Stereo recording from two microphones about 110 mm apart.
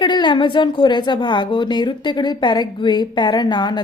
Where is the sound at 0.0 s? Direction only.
45° left (ahead or behind).